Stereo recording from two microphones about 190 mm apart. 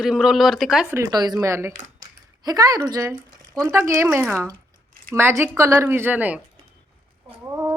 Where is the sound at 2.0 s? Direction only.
20° right (ahead or behind).